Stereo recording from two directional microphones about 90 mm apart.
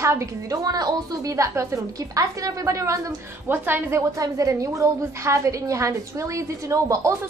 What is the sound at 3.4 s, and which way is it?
Speech, 25° right (ahead or behind).